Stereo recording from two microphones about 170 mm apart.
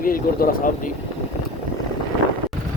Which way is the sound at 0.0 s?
55° left (ahead or behind).